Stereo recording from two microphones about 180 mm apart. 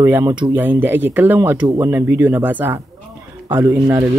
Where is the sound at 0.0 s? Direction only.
15° right (ahead or behind).